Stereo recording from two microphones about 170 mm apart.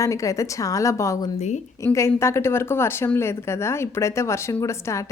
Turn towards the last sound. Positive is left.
turn(degrees=15)  # may be behind; listen again after turning